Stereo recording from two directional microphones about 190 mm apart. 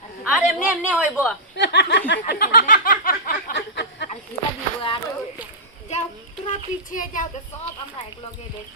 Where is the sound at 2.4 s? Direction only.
50° left (ahead or behind).